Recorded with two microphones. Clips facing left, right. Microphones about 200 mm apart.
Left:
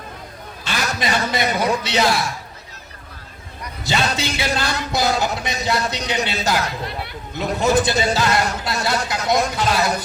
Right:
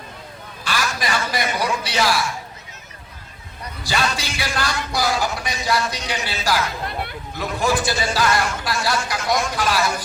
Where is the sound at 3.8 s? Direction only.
25° left (ahead or behind).